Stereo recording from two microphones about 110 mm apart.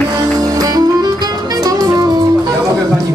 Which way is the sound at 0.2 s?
35° right (ahead or behind).